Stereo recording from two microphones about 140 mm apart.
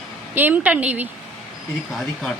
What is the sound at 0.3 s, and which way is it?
Speech, 10° right (ahead or behind).